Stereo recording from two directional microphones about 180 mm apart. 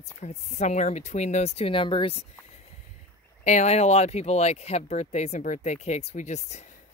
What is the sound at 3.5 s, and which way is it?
Speech, 40° left (ahead or behind).